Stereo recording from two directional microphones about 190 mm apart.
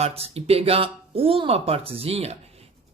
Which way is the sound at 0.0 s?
30° right (ahead or behind).